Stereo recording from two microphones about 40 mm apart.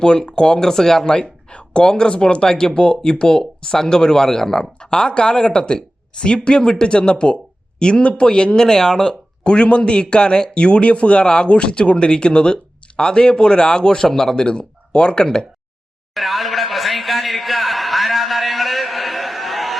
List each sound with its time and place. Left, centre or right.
0.0 s speech: left
0.7 s speech: centre
14.3 s speech: left
16.1 s a sound: centre